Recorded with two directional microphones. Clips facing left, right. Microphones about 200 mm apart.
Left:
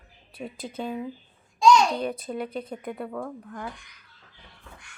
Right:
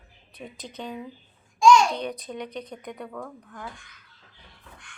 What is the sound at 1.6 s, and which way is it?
Babbling, 20° left (ahead or behind).